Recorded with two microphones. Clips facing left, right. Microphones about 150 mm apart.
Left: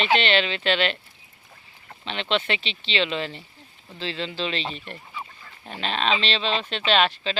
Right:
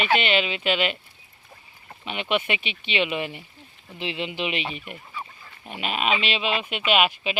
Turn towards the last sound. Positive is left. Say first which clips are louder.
# even
turn(degrees=-10)  # may be behind; listen again after turning